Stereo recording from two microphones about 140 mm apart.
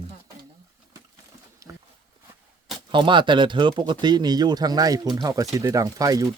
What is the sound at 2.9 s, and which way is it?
Speech, 35° right (ahead or behind).